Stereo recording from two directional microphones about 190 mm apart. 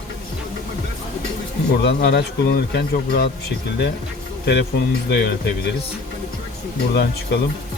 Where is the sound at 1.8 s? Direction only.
60° left (ahead or behind).